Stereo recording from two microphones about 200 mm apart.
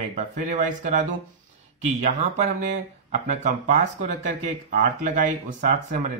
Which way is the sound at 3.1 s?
35° right (ahead or behind).